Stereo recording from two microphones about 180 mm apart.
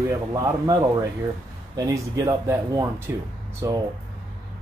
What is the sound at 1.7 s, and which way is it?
Speech, 20° right (ahead or behind).